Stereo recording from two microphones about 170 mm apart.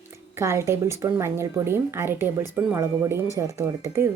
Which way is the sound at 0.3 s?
15° right (ahead or behind).